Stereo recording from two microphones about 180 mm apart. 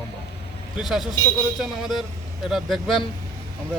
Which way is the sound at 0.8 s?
Centre (ahead or behind).